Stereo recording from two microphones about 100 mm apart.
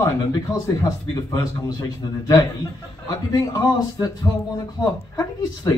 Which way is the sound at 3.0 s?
35° left (ahead or behind).